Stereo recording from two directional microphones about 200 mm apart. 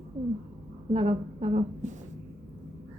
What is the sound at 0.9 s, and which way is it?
A woman's voice, 30° right (ahead or behind).